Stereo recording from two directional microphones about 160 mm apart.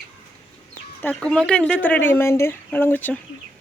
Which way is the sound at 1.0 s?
5° left (ahead or behind).